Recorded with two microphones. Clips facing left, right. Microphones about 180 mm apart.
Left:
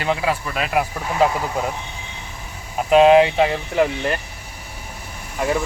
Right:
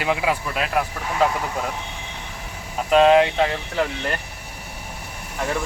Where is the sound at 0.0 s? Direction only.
10° right (ahead or behind).